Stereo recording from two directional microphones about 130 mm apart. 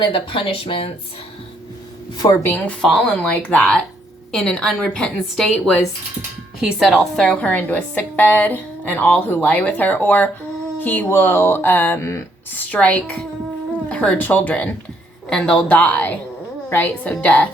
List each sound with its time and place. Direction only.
0.0 s speech: 45° left (ahead or behind)
2.1 s speech: 30° left (ahead or behind)
2.4 s a woman's voice: 15° left (ahead or behind)